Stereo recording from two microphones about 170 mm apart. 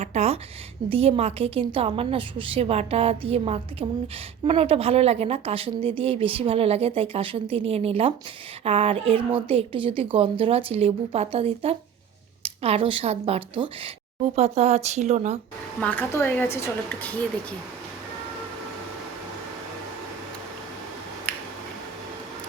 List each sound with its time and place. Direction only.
0.0 s a woman's voice: 40° right (ahead or behind)
15.8 s a woman's voice: 10° left (ahead or behind)